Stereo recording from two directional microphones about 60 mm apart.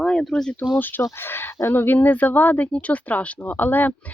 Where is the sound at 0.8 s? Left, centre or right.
Left.